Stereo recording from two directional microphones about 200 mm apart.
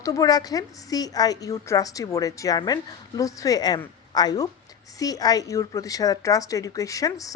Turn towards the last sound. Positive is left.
turn(degrees=15)  # may be behind; listen again after turning